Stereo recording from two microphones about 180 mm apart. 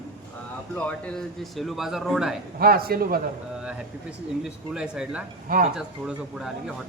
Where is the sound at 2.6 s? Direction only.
55° right (ahead or behind).